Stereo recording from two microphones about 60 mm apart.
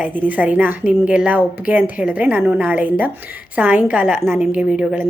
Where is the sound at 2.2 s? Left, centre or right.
Right.